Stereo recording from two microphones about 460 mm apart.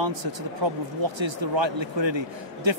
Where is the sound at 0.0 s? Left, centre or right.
Right.